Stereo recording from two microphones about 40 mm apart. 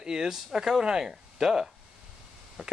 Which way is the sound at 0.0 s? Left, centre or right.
Centre.